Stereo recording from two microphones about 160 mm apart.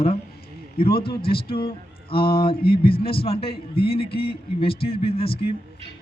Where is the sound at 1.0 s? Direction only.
35° left (ahead or behind).